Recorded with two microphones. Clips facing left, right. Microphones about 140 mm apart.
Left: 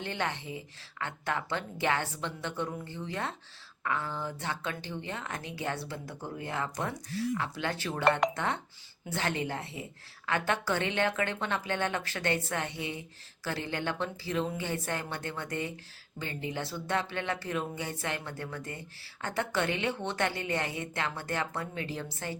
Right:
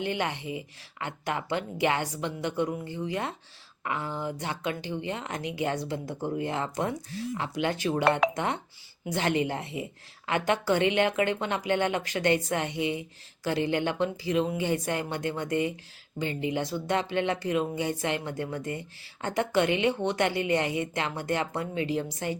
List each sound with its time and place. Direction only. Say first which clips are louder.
0.0 s speech: right 4 dB; 15° right (ahead or behind)